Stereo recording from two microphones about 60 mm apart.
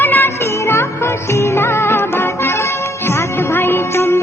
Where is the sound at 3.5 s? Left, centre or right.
Left.